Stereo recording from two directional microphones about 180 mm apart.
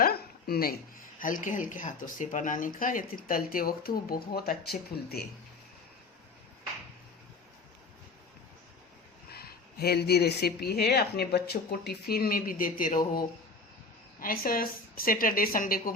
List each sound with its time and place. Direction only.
0.0 s a woman's voice: 60° left (ahead or behind)
9.3 s speech: 60° left (ahead or behind)
14.2 s a woman's voice: 55° left (ahead or behind)